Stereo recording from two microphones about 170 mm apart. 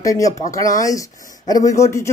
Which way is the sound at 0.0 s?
20° left (ahead or behind).